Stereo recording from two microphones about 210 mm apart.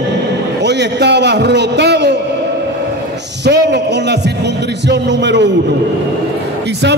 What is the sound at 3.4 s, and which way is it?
A man's voice, 55° right (ahead or behind).